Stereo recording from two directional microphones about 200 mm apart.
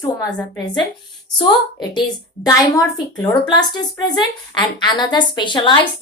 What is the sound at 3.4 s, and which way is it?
A woman's voice, 20° left (ahead or behind).